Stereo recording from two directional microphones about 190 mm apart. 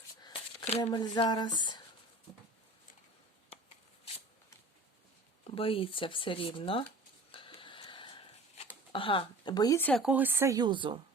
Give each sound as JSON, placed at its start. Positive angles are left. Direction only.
{"t": 0.8, "sound": "speech", "side_deg": 25}
{"t": 5.5, "sound": "speech", "side_deg": 30}
{"t": 7.3, "sound": "a sound", "side_deg": 30}
{"t": 8.9, "sound": "speech", "side_deg": 25}
{"t": 10.0, "sound": "speech", "side_deg": -5}